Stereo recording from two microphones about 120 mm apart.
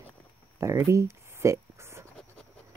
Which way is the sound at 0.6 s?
25° right (ahead or behind).